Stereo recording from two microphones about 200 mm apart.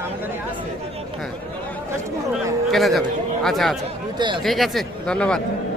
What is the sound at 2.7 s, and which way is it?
A man's voice, centre (ahead or behind).